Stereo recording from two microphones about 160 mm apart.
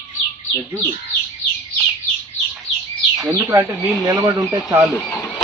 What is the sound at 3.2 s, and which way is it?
Speech, 15° right (ahead or behind).